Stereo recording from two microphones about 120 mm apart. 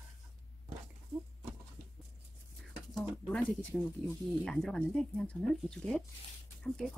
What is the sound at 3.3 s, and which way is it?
Speech, 5° left (ahead or behind).